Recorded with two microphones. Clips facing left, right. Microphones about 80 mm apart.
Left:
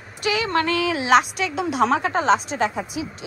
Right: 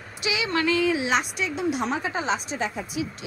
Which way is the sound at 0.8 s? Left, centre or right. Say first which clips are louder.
Left 5 dB; left.